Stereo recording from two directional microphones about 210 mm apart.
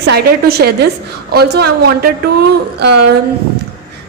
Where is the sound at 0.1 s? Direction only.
50° right (ahead or behind).